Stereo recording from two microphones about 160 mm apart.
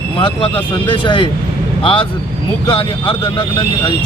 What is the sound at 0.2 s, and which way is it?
Speech, 35° left (ahead or behind).